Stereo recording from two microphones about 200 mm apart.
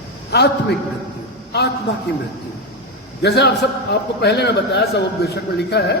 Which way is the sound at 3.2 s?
55° left (ahead or behind).